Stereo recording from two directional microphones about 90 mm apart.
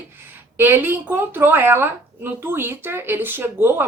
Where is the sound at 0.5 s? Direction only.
25° right (ahead or behind).